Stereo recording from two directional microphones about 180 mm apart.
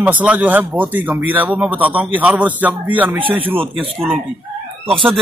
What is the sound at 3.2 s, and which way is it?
Speech, 30° right (ahead or behind).